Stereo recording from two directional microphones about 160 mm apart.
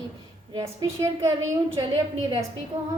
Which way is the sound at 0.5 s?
20° right (ahead or behind).